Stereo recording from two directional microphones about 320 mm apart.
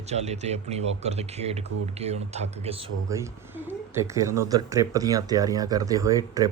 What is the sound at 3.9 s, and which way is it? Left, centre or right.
Speech, centre.